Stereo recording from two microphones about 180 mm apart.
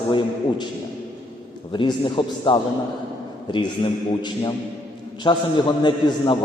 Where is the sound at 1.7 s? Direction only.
30° left (ahead or behind).